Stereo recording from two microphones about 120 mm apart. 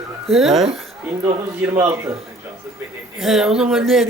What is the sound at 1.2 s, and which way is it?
Speech, 20° right (ahead or behind).